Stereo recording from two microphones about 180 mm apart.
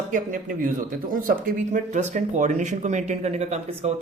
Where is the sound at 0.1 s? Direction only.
45° right (ahead or behind).